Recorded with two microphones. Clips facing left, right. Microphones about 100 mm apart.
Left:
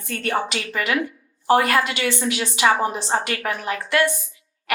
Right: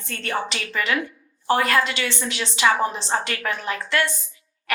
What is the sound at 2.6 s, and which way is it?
Speech, 30° left (ahead or behind).